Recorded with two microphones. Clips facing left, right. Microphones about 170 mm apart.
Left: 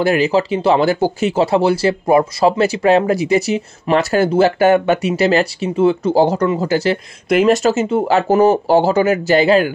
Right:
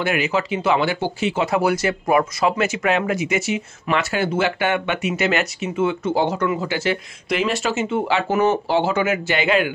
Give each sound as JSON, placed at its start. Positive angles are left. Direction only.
{"t": 0.0, "sound": "speech", "side_deg": 35}